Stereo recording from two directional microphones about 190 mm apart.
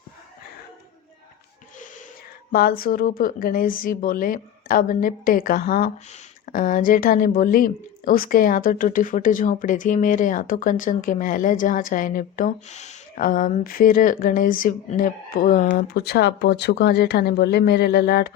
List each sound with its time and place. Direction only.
2.5 s a woman's voice: 50° left (ahead or behind)